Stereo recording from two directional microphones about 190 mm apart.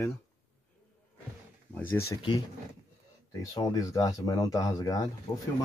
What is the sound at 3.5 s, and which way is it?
Speech, 20° left (ahead or behind).